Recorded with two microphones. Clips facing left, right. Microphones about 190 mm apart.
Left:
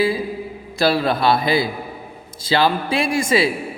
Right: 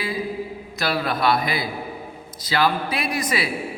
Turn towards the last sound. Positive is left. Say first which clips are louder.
# left 7 dB
turn(degrees=25)  # may be behind; listen again after turning